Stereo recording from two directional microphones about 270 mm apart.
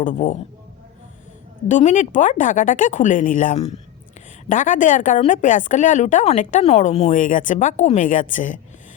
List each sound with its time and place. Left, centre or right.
0.0 s speech: left
1.6 s speech: left